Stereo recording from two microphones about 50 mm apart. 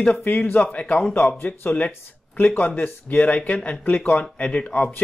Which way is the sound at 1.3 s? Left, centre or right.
Left.